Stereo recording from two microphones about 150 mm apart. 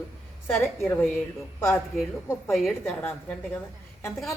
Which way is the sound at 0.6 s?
15° left (ahead or behind).